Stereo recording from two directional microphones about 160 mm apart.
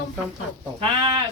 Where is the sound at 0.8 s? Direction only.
35° right (ahead or behind).